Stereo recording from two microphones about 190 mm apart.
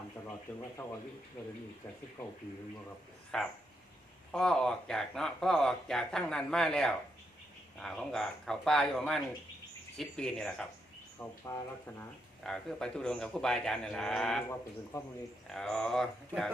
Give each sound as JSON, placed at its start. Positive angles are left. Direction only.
{"t": 3.3, "sound": "speech", "side_deg": 5}
{"t": 11.2, "sound": "speech", "side_deg": 15}
{"t": 12.4, "sound": "speech", "side_deg": 5}
{"t": 15.4, "sound": "speech", "side_deg": 0}